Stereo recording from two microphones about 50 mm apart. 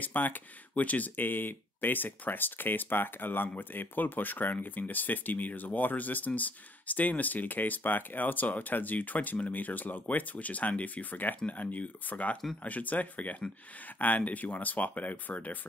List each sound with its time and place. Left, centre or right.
0.0 s speech: left